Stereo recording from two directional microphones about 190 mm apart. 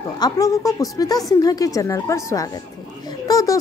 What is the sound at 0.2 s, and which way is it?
A woman's voice, 15° left (ahead or behind).